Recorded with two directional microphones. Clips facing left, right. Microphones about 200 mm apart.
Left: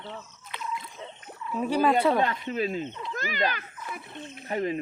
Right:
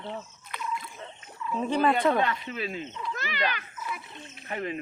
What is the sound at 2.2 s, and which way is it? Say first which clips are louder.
A child's voice: left 2 dB; 40° left (ahead or behind).